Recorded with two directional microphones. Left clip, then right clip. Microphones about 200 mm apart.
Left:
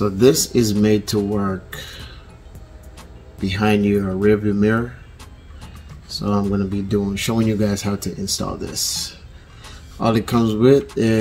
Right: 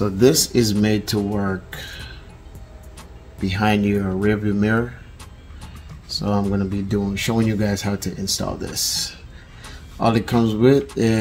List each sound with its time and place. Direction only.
0.0 s speech: 15° right (ahead or behind)
1.1 s speech: centre (ahead or behind)
1.4 s speech: 15° right (ahead or behind)
3.4 s speech: 15° right (ahead or behind)
6.0 s speech: 15° right (ahead or behind)